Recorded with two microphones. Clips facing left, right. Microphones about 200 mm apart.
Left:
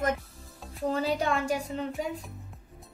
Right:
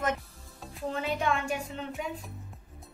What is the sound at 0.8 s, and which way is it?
Speech, 35° left (ahead or behind).